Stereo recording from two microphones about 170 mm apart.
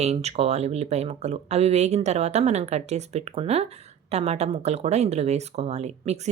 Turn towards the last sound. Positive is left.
turn(degrees=-40)  # may be behind; listen again after turning